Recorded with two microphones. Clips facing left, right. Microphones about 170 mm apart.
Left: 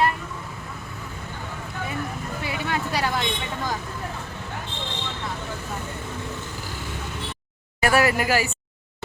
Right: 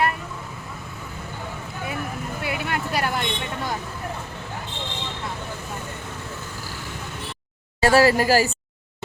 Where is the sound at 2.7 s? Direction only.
5° right (ahead or behind).